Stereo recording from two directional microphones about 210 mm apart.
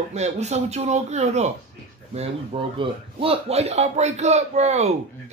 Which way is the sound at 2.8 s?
25° right (ahead or behind).